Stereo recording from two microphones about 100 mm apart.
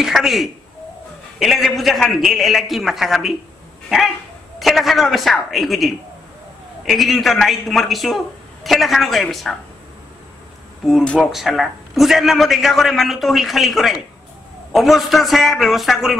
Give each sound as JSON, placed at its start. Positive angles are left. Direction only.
{"t": 0.0, "sound": "a man's voice", "side_deg": -5}
{"t": 4.6, "sound": "a man's voice", "side_deg": 0}
{"t": 11.1, "sound": "a man's voice", "side_deg": 0}